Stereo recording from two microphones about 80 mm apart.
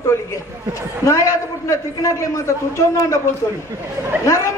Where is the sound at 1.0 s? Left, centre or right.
Left.